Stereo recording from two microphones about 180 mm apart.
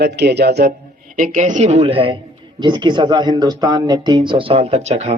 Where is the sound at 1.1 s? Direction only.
45° right (ahead or behind).